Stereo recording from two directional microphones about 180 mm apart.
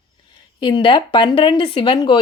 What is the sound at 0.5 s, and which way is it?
Speech, 25° left (ahead or behind).